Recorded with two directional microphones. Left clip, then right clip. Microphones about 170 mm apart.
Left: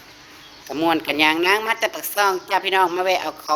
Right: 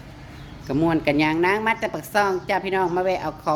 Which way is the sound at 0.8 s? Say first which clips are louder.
Left 2 dB; 5° right (ahead or behind).